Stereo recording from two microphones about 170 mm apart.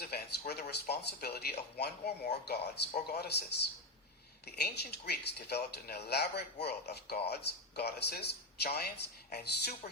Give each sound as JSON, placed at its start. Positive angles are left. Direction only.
{"t": 0.0, "sound": "speech", "side_deg": 70}
{"t": 4.4, "sound": "speech", "side_deg": 70}